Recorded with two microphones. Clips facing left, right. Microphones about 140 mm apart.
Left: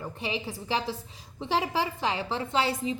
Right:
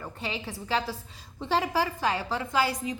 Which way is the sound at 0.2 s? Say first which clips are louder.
Left 2 dB; 15° left (ahead or behind).